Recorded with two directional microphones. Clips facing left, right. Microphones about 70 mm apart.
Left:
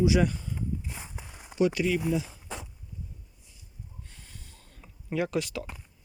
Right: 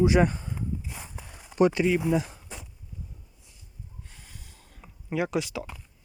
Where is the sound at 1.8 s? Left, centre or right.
Right.